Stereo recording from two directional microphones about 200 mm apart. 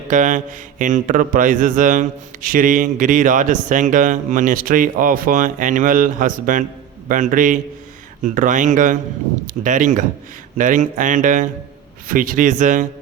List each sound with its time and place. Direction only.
0.1 s a man's voice: 40° right (ahead or behind)